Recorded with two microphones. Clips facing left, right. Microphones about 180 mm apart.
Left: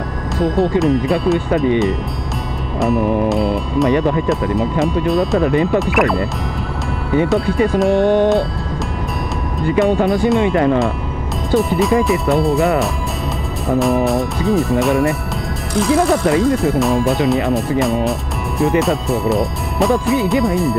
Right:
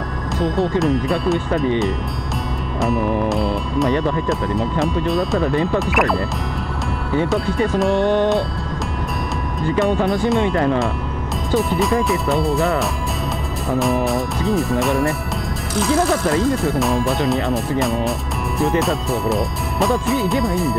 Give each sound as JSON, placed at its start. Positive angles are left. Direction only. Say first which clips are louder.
{"t": 0.4, "sound": "speech", "louder": "left 4 dB", "side_deg": 0}
{"t": 2.8, "sound": "speech", "louder": "left 4 dB", "side_deg": 0}
{"t": 7.9, "sound": "music", "louder": "left 4 dB", "side_deg": 50}
{"t": 9.8, "sound": "speech", "louder": "left 4 dB", "side_deg": 0}
{"t": 13.7, "sound": "speech", "louder": "left 4 dB", "side_deg": 0}